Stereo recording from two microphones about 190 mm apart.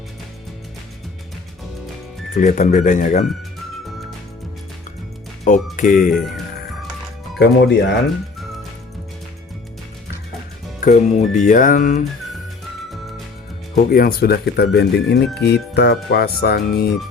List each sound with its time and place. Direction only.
2.3 s speech: 40° left (ahead or behind)
5.7 s music: 45° left (ahead or behind)
6.1 s speech: centre (ahead or behind)
7.3 s speech: 60° left (ahead or behind)
10.8 s music: 40° left (ahead or behind)
13.7 s speech: 50° left (ahead or behind)